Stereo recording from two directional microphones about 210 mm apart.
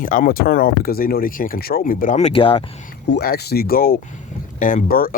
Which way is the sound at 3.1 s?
50° left (ahead or behind).